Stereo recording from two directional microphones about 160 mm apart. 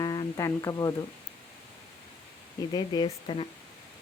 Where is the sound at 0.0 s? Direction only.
25° left (ahead or behind).